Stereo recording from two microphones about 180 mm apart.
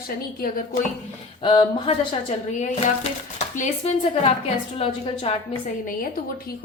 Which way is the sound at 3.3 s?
40° left (ahead or behind).